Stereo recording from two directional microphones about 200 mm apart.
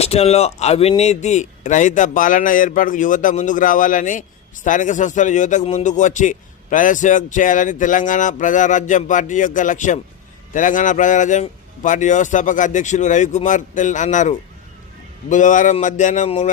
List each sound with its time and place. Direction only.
0.0 s speech: 30° left (ahead or behind)